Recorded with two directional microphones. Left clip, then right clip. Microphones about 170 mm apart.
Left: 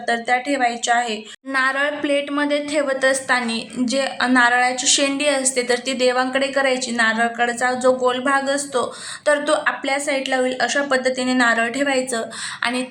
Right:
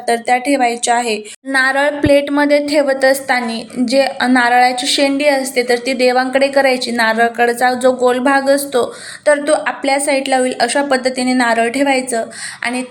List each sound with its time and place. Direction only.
0.0 s a woman's voice: 20° right (ahead or behind)